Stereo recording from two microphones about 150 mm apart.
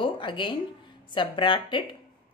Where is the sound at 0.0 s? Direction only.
35° left (ahead or behind).